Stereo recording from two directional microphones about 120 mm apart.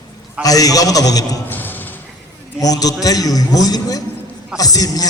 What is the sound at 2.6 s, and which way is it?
A man's voice, 30° left (ahead or behind).